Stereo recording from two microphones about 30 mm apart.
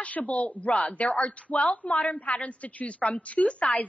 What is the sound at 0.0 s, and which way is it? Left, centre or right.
A woman's voice, left.